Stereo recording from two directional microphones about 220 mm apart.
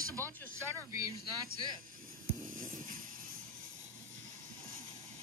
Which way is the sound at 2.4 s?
65° right (ahead or behind).